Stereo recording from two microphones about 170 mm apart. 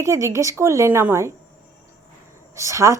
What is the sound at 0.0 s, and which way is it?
A man's voice, 15° right (ahead or behind).